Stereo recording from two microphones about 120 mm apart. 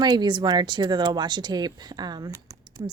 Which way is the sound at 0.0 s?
35° right (ahead or behind).